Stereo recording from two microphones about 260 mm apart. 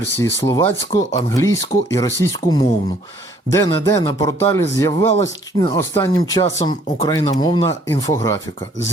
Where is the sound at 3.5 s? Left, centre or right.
Centre.